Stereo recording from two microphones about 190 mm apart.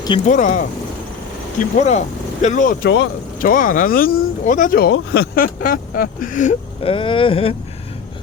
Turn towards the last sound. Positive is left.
turn(degrees=30)  # may be behind; listen again after turning